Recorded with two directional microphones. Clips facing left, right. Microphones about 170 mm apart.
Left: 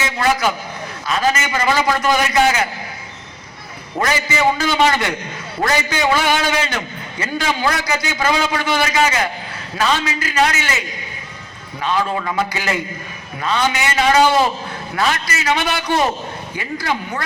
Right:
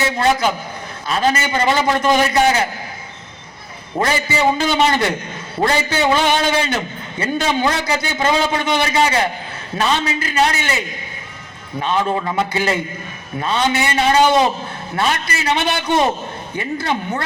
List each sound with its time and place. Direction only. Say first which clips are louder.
0.0 s a man's voice: right 2 dB; 30° right (ahead or behind)
4.0 s a man's voice: even; 30° right (ahead or behind)
14.9 s a man's voice: even; 30° right (ahead or behind)